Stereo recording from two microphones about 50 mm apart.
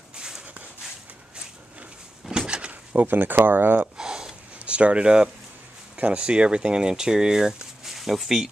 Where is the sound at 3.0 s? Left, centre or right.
Right.